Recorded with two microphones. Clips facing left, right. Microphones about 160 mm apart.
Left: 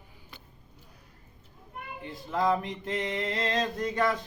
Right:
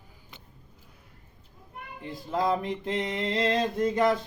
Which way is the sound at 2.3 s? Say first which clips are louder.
Right 1 dB; 35° right (ahead or behind).